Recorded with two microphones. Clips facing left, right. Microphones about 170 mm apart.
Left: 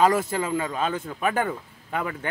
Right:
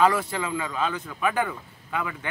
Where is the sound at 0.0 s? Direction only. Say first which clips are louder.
Left 1 dB; 45° left (ahead or behind).